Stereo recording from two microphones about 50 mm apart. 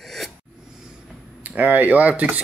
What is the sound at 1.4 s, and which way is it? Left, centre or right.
Speech, right.